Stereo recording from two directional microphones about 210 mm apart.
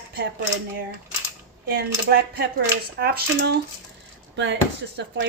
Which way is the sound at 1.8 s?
50° right (ahead or behind).